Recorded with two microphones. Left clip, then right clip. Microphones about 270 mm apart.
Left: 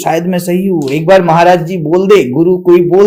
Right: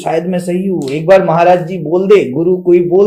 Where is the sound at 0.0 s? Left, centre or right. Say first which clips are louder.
Left 2 dB; left.